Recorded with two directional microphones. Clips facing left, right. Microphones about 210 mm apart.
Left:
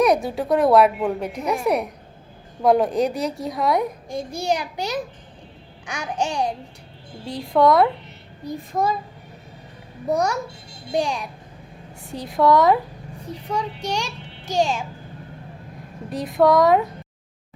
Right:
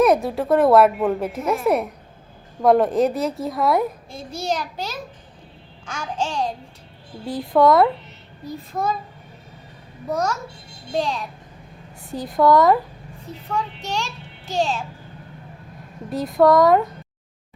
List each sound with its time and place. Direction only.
0.0 s speech: centre (ahead or behind)
4.1 s a child's voice: 15° left (ahead or behind)
7.3 s speech: 5° right (ahead or behind)
10.1 s a child's voice: 15° left (ahead or behind)
12.0 s speech: centre (ahead or behind)
13.5 s a child's voice: 10° left (ahead or behind)
16.0 s speech: centre (ahead or behind)